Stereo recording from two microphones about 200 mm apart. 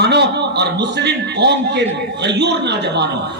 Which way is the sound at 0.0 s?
55° right (ahead or behind).